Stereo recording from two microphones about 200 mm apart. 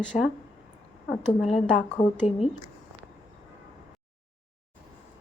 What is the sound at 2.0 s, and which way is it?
Speech, 30° left (ahead or behind).